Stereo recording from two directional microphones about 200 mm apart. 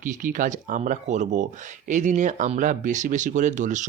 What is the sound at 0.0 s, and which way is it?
Speech, 40° right (ahead or behind).